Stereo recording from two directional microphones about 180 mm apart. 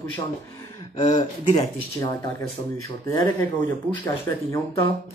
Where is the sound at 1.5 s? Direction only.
20° left (ahead or behind).